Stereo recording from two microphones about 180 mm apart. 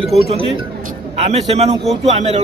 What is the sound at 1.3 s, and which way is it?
Speech, 35° right (ahead or behind).